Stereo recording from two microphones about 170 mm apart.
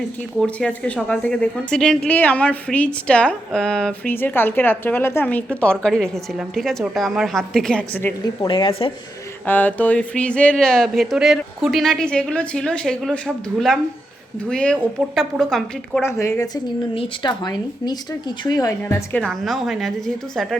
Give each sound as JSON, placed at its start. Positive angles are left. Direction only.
{"t": 0.3, "sound": "a woman's voice", "side_deg": 5}
{"t": 8.2, "sound": "speech", "side_deg": 25}
{"t": 9.5, "sound": "speech", "side_deg": 10}
{"t": 16.0, "sound": "a woman's voice", "side_deg": 15}
{"t": 16.9, "sound": "a woman's voice", "side_deg": 30}
{"t": 19.2, "sound": "speech", "side_deg": 0}